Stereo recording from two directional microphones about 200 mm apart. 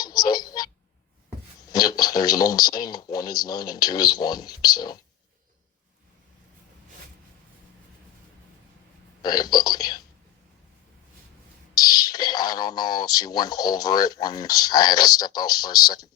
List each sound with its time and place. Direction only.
0.0 s a sound: 20° left (ahead or behind)
1.7 s speech: 20° left (ahead or behind)
9.2 s speech: 20° left (ahead or behind)
11.7 s speech: 20° left (ahead or behind)